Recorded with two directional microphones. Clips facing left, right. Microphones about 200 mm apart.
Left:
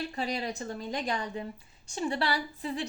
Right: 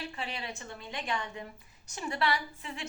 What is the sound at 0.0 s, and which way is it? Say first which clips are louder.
A woman's voice: left 6 dB; 40° left (ahead or behind).